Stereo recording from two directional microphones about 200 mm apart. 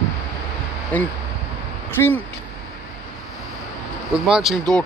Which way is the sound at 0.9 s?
10° left (ahead or behind).